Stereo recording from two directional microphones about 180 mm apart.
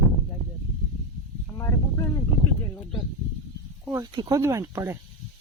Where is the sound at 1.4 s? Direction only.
15° left (ahead or behind).